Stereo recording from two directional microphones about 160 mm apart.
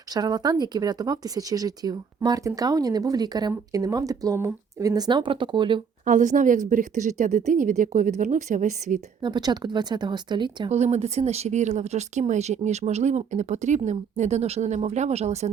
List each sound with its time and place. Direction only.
0.1 s speech: 25° right (ahead or behind)
6.1 s speech: 55° right (ahead or behind)
9.2 s speech: 25° right (ahead or behind)
10.7 s speech: 45° right (ahead or behind)